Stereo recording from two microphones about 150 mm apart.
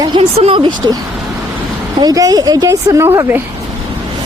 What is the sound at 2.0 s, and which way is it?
Speech, 25° right (ahead or behind).